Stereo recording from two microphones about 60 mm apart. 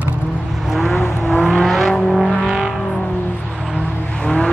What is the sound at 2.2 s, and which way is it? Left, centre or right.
Vehicle, centre.